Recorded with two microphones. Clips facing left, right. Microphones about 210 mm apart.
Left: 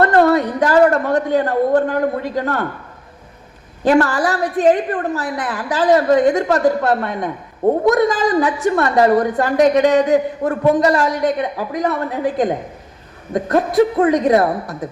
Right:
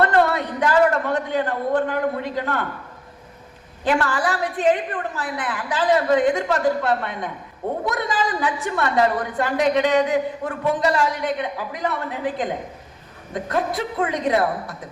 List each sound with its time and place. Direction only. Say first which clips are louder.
0.0 s a woman's voice: left 6 dB; 45° left (ahead or behind)
3.8 s a woman's voice: left 7 dB; 45° left (ahead or behind)